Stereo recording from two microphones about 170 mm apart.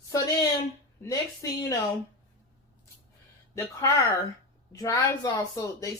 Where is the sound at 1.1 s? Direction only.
20° left (ahead or behind).